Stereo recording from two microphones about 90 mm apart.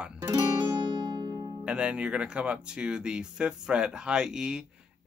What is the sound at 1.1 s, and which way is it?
Music, 50° right (ahead or behind).